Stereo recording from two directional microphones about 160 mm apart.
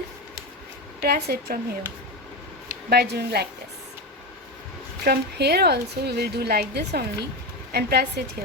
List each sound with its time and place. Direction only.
1.0 s speech: 80° right
2.9 s a woman's voice: 80° right
5.0 s a woman's voice: 85° right